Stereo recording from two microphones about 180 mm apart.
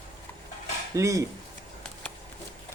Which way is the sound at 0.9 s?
15° right (ahead or behind).